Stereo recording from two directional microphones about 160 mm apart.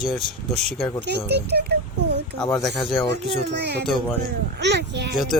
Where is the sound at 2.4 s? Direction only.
5° left (ahead or behind).